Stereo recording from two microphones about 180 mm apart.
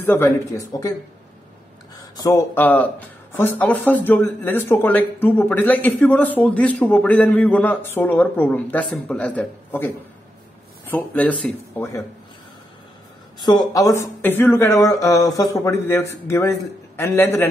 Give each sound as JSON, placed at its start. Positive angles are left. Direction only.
{"t": 0.0, "sound": "speech", "side_deg": 10}
{"t": 2.1, "sound": "speech", "side_deg": 20}
{"t": 13.5, "sound": "speech", "side_deg": 20}